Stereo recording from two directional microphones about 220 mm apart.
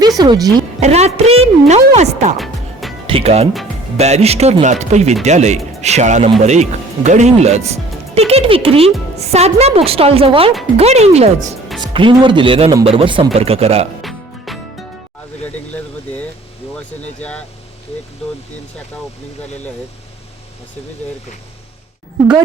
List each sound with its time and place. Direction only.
0.2 s speech: 15° right (ahead or behind)
0.8 s speech: 30° right (ahead or behind)
14.0 s music: centre (ahead or behind)
15.4 s vehicle: 5° left (ahead or behind)
17.2 s speech: 5° left (ahead or behind)